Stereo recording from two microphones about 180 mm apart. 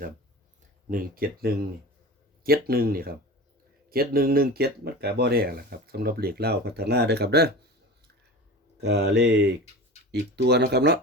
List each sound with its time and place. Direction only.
0.9 s speech: 50° right (ahead or behind)
8.8 s speech: 65° right (ahead or behind)